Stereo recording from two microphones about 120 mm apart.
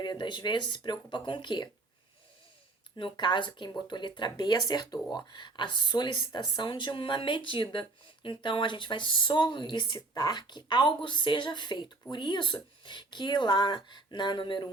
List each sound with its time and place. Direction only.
0.0 s speech: 40° left (ahead or behind)
3.0 s speech: 40° left (ahead or behind)